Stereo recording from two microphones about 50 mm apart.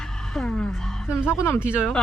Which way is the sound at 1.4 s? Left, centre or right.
Left.